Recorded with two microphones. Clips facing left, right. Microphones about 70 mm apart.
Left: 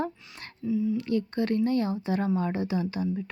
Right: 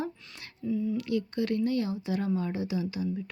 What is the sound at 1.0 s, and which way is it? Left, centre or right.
A woman's voice, left.